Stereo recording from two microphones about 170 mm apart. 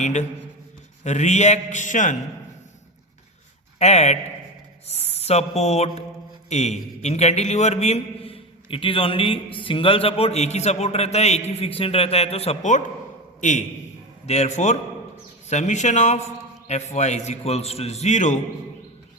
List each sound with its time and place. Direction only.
0.0 s a man's voice: 45° left (ahead or behind)
3.8 s a man's voice: 40° left (ahead or behind)